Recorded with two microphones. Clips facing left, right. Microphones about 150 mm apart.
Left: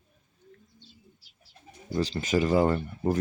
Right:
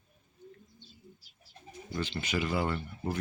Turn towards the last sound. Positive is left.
turn(degrees=40)  # may be behind; listen again after turning